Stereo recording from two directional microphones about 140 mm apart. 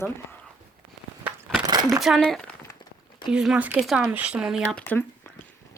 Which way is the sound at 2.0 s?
Centre (ahead or behind).